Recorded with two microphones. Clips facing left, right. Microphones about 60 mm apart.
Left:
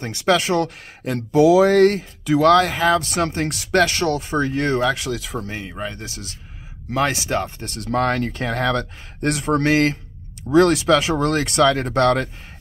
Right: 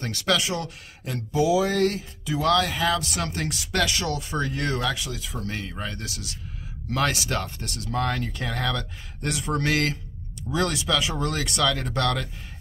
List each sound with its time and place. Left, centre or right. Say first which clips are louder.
0.0 s speech: left 6 dB; left
0.4 s speech: left 9 dB; left
2.2 s speech: left 9 dB; left
2.5 s speech: left 7 dB; left
3.4 s speech: left 7 dB; left
5.1 s speech: left 8 dB; left
5.4 s speech: left 3 dB; left
6.0 s speech: left 1 dB; left
7.6 s speech: left 7 dB; left
10.5 s speech: left 11 dB; left